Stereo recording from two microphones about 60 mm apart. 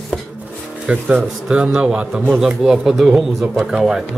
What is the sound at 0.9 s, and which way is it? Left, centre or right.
A man's voice, right.